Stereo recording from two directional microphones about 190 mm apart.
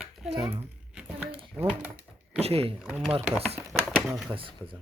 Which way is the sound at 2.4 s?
30° right (ahead or behind).